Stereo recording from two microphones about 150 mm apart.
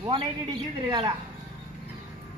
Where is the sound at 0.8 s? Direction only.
30° right (ahead or behind).